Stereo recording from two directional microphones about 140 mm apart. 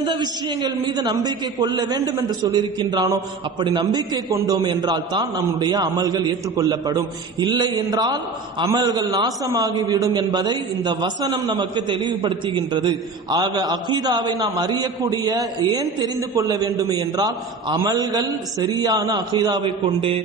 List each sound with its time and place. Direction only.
0.0 s a man's voice: 30° right (ahead or behind)